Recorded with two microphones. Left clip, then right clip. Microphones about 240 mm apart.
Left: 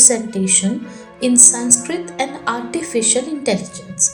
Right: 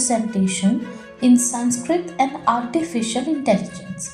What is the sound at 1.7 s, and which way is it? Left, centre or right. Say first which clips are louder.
A woman's voice: left 1 dB; left.